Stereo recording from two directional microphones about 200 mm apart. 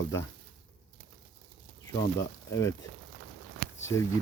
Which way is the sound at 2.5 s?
15° left (ahead or behind).